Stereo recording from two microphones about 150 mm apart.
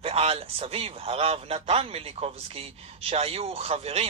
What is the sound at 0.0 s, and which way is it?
Speech, 40° right (ahead or behind).